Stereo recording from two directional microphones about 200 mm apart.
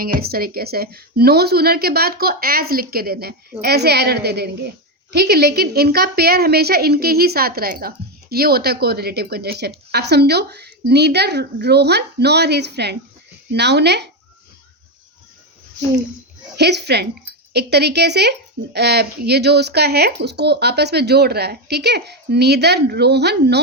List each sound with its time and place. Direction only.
0.0 s a woman's voice: 50° right (ahead or behind)
16.6 s speech: 55° right (ahead or behind)